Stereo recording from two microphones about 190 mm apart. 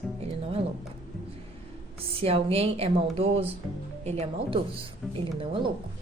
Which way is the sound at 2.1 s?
30° right (ahead or behind).